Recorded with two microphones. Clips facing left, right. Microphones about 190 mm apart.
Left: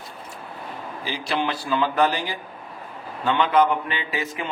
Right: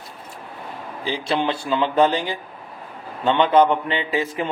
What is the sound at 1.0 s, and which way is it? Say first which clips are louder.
A man's voice: right 4 dB; 25° right (ahead or behind).